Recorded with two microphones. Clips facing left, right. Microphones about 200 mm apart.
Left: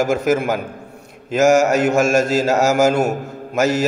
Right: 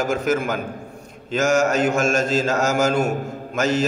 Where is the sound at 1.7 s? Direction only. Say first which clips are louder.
Left 3 dB; 70° left (ahead or behind).